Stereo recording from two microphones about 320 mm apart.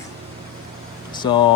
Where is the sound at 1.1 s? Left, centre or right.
Centre.